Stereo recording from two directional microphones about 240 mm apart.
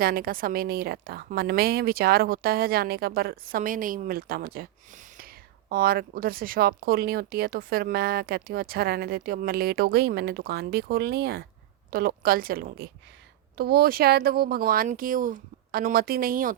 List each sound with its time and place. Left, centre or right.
0.0 s a woman's voice: right